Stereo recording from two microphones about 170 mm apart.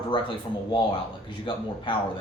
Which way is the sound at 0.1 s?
30° left (ahead or behind).